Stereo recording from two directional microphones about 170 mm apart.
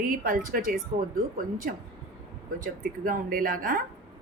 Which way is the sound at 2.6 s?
55° right (ahead or behind).